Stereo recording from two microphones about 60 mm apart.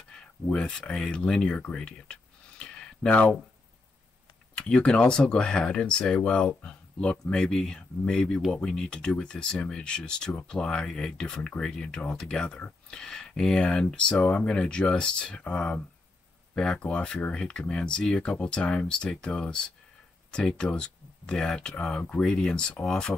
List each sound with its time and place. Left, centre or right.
0.1 s speech: centre
2.6 s a sound: centre
3.1 s speech: left
4.6 s speech: centre